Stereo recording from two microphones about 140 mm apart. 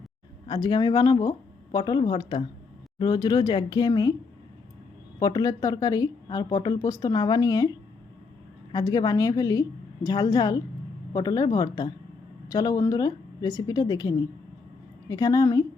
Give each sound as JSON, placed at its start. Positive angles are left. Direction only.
{"t": 0.4, "sound": "speech", "side_deg": 30}
{"t": 5.2, "sound": "speech", "side_deg": 25}
{"t": 8.7, "sound": "speech", "side_deg": 25}